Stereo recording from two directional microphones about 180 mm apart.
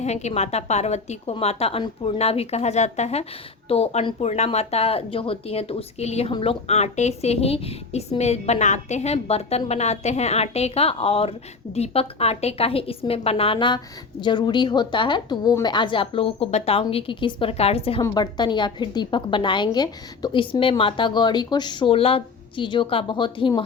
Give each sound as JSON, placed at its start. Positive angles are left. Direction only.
{"t": 0.0, "sound": "a woman's voice", "side_deg": 40}